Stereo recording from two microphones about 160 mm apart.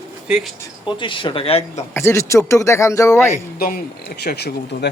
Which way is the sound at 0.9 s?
30° left (ahead or behind).